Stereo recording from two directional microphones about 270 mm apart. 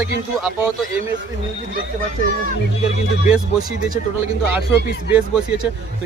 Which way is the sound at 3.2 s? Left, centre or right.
Centre.